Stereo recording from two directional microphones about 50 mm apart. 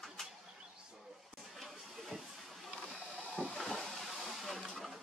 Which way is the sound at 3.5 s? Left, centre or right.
Centre.